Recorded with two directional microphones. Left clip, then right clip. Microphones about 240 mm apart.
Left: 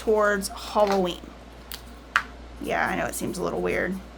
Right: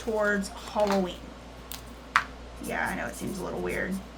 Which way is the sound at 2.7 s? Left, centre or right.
Left.